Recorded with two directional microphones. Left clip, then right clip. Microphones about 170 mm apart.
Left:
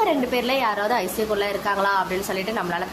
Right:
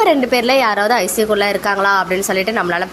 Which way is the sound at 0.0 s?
25° right (ahead or behind).